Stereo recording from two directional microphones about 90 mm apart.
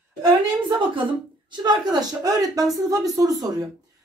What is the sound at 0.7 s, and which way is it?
A woman's voice, 60° right (ahead or behind).